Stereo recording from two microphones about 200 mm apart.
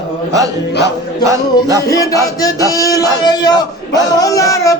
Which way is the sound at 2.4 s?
15° left (ahead or behind).